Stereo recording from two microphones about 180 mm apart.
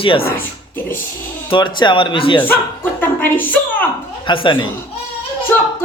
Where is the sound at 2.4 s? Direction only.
10° left (ahead or behind).